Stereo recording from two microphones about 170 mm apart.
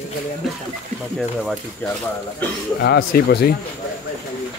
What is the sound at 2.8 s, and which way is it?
Speech, 65° left (ahead or behind).